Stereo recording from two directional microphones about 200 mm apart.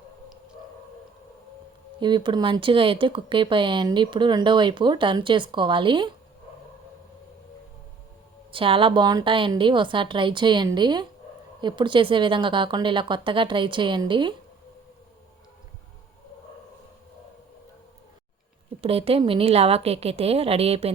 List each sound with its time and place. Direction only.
2.0 s speech: 25° right (ahead or behind)
8.5 s speech: 25° right (ahead or behind)
18.8 s speech: 30° right (ahead or behind)